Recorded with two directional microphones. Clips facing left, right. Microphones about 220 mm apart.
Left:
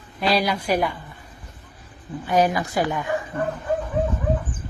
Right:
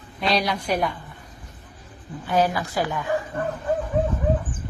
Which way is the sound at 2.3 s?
15° left (ahead or behind).